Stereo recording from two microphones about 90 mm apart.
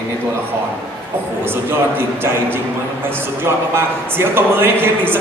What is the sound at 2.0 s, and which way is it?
Speech, 25° right (ahead or behind).